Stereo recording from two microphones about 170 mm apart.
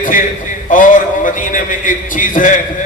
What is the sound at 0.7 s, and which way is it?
A man's voice, 50° left (ahead or behind).